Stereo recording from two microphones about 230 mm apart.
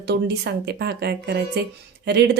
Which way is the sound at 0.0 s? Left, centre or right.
Right.